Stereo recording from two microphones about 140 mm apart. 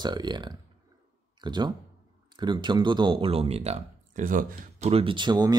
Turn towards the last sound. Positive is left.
turn(degrees=-30)  # may be behind; listen again after turning